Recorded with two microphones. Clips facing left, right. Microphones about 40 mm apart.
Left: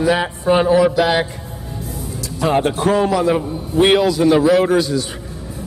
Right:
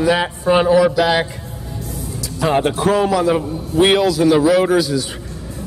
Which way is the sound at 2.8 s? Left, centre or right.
Centre.